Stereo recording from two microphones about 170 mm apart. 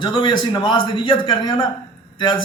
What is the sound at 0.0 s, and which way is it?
A man's voice, 25° left (ahead or behind).